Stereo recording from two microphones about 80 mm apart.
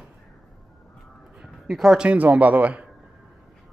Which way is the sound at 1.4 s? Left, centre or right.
Centre.